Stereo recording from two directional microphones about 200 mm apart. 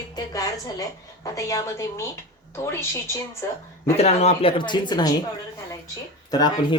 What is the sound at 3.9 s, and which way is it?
Speech, 30° left (ahead or behind).